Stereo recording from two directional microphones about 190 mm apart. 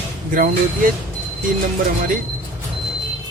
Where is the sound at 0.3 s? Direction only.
45° right (ahead or behind).